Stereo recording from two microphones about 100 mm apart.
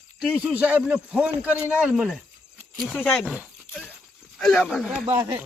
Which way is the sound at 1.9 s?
5° right (ahead or behind).